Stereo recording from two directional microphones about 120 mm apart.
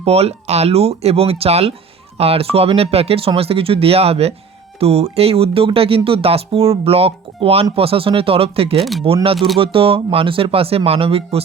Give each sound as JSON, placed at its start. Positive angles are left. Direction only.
{"t": 0.0, "sound": "speech", "side_deg": -60}
{"t": 8.8, "sound": "speech", "side_deg": 0}
{"t": 9.6, "sound": "speech", "side_deg": -50}